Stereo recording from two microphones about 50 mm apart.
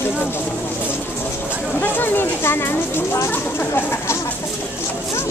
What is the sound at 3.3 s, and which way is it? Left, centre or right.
Speech, left.